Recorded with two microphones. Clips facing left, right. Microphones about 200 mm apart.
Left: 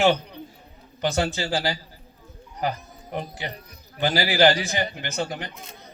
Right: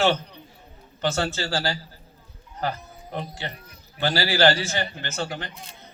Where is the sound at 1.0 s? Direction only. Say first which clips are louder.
Left 1 dB; 15° left (ahead or behind).